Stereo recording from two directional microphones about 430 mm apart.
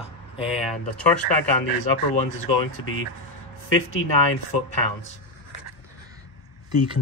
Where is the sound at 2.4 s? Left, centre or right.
Left.